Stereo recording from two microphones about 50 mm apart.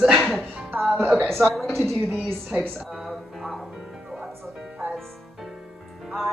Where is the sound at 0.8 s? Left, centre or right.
Centre.